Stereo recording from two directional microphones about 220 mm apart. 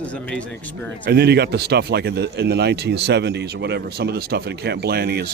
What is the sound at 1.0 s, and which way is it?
Speech, 50° right (ahead or behind).